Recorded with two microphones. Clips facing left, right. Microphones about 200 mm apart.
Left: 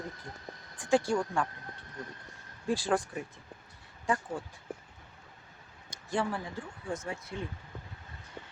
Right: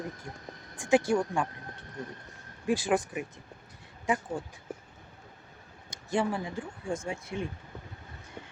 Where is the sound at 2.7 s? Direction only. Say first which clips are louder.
Right 2 dB; 15° right (ahead or behind).